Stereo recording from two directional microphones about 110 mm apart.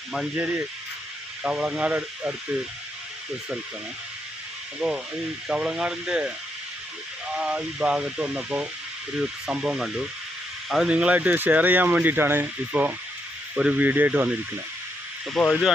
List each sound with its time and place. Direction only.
0.3 s speech: 15° right (ahead or behind)
4.8 s speech: 5° right (ahead or behind)
7.3 s speech: 10° right (ahead or behind)
15.4 s speech: centre (ahead or behind)